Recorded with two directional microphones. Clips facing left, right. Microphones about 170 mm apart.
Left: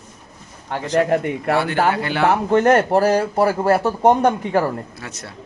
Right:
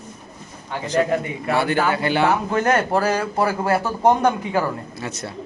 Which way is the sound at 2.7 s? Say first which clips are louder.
Left 2 dB; 30° left (ahead or behind).